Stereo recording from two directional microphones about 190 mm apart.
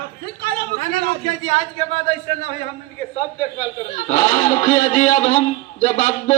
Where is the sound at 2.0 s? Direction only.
35° left (ahead or behind).